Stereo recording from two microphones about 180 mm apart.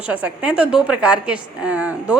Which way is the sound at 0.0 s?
10° right (ahead or behind).